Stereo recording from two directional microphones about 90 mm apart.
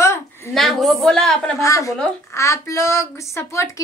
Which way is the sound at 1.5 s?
35° left (ahead or behind).